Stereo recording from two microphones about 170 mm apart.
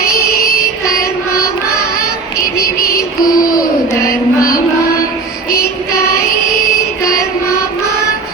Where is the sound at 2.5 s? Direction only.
60° left (ahead or behind).